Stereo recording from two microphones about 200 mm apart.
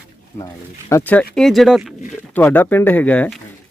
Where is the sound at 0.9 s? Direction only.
10° left (ahead or behind).